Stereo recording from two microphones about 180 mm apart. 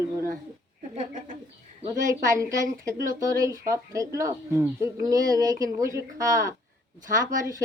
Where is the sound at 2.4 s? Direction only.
20° right (ahead or behind).